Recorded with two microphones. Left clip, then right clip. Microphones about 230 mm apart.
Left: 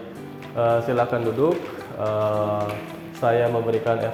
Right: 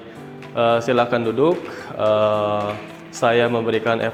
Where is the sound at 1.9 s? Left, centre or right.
Right.